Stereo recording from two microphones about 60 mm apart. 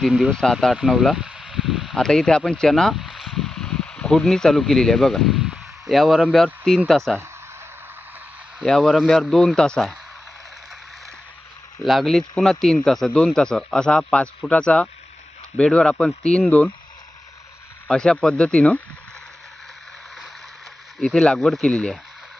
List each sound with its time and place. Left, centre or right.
0.3 s speech: centre
0.8 s speech: centre
1.1 s a sound: centre
2.0 s speech: centre
2.9 s a sound: centre
5.9 s speech: centre
8.6 s speech: centre
11.8 s speech: centre
16.5 s speech: left
17.8 s speech: centre
21.0 s speech: centre